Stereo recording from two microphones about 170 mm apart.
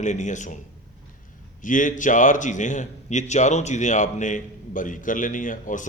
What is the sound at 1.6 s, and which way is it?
A man's voice, 50° left (ahead or behind).